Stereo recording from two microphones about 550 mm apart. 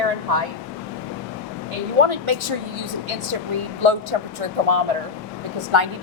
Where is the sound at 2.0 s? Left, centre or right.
Right.